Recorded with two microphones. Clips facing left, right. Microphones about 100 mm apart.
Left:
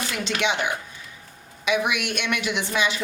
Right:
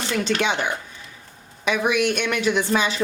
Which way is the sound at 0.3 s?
40° right (ahead or behind).